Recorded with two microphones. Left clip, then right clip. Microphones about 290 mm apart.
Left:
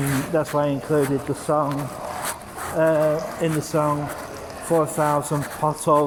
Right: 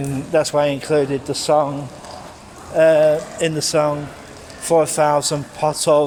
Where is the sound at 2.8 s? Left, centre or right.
Right.